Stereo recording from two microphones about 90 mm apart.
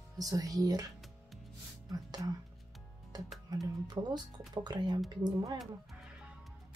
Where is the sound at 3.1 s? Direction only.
50° right (ahead or behind).